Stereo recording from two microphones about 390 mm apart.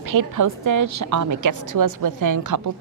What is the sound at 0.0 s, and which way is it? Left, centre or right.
A woman's voice, right.